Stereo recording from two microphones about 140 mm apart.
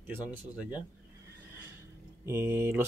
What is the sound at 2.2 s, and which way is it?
Speech, 20° right (ahead or behind).